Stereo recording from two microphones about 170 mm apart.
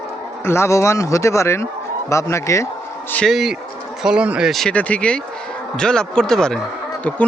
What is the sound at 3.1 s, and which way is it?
Speech, centre (ahead or behind).